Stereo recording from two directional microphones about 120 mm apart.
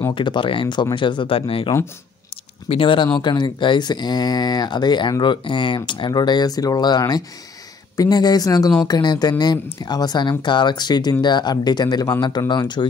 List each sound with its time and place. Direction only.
0.1 s speech: 40° left (ahead or behind)
2.7 s speech: 45° left (ahead or behind)